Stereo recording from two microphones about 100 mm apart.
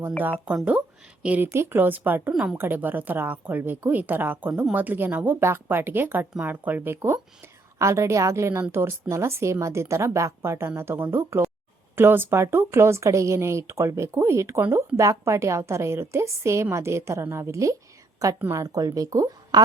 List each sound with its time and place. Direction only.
0.4 s speech: 10° right (ahead or behind)
2.3 s a woman's voice: 5° right (ahead or behind)
2.6 s speech: 20° right (ahead or behind); by 19.6 s 40° right (ahead or behind)